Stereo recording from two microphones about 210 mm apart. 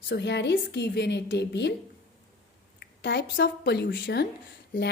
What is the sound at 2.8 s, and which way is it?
A woman's voice, 55° left (ahead or behind).